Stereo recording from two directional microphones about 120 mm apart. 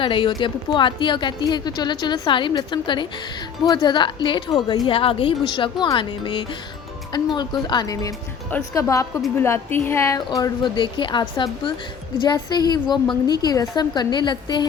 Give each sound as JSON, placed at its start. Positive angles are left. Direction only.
{"t": 0.0, "sound": "a woman's voice", "side_deg": 45}